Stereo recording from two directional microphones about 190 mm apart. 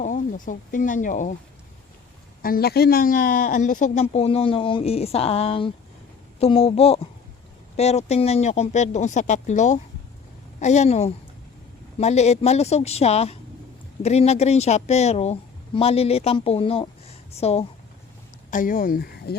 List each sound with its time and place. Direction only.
0.0 s speech: 40° left (ahead or behind)
2.4 s speech: 50° left (ahead or behind); by 17.7 s 35° left (ahead or behind)
18.5 s speech: 45° left (ahead or behind)